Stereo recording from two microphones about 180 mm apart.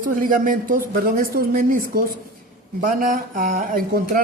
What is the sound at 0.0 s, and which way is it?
Speech, 50° right (ahead or behind).